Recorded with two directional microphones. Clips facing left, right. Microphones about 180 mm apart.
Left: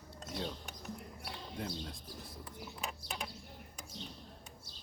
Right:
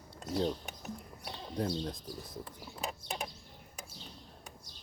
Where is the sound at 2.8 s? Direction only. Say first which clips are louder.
Right 6 dB; 40° right (ahead or behind).